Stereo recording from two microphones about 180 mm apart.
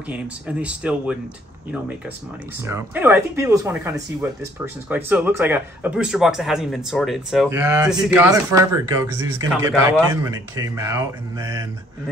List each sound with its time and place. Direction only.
0.1 s speech: 5° right (ahead or behind)
2.6 s speech: 10° right (ahead or behind)
7.4 s speech: 15° right (ahead or behind)